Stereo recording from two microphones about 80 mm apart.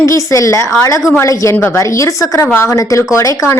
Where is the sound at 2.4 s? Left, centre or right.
Left.